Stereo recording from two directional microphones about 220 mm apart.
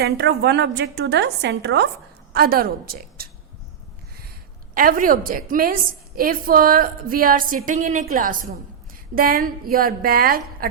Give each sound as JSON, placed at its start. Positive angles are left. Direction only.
{"t": 0.0, "sound": "a woman's voice", "side_deg": -50}
{"t": 4.7, "sound": "a woman's voice", "side_deg": -40}